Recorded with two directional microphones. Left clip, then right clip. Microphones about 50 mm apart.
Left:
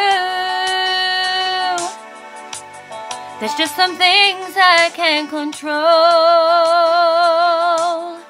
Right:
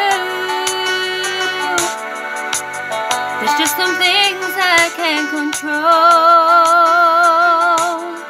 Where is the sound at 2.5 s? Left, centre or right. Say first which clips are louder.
Right 11 dB; right.